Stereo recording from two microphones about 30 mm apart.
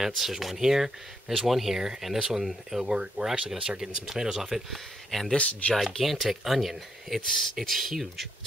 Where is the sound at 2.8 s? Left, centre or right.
Right.